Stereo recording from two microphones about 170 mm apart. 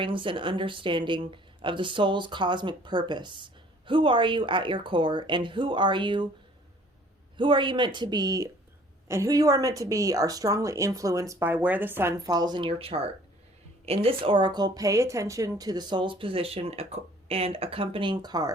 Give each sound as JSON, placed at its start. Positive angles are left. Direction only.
{"t": 0.0, "sound": "speech", "side_deg": -30}
{"t": 7.3, "sound": "speech", "side_deg": -30}